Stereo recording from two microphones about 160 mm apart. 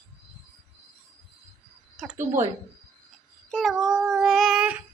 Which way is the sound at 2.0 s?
Centre (ahead or behind).